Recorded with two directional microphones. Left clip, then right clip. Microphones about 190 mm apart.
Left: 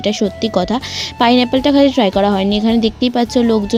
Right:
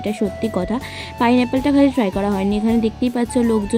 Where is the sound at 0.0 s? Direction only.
25° left (ahead or behind).